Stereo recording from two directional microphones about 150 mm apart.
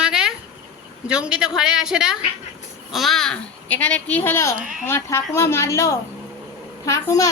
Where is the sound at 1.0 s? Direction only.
5° right (ahead or behind).